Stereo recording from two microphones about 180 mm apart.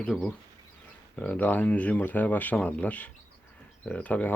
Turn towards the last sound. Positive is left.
turn(degrees=10)  # may be behind; listen again after turning